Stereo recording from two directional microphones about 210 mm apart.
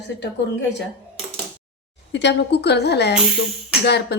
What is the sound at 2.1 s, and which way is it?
A woman's voice, 55° left (ahead or behind).